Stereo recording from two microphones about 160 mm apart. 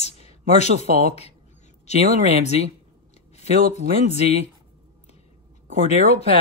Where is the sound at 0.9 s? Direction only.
65° right (ahead or behind).